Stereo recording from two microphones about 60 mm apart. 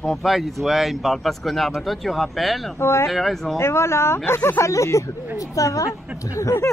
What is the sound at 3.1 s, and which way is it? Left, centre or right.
Speech, centre.